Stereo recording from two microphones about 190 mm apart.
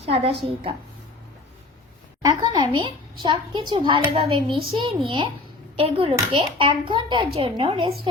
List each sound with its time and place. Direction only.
0.0 s a woman's voice: 30° right (ahead or behind)
2.2 s a child's voice: 25° right (ahead or behind)